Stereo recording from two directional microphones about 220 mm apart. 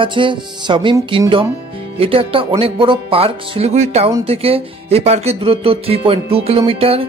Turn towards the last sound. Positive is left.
turn(degrees=-25)  # may be behind; listen again after turning